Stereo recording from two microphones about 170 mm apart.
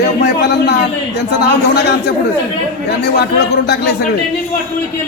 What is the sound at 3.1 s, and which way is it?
Speech, 70° left (ahead or behind).